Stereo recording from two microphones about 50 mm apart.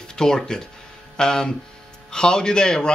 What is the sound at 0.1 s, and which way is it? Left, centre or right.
Speech, centre.